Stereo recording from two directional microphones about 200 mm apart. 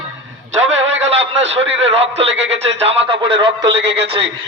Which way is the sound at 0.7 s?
70° right (ahead or behind).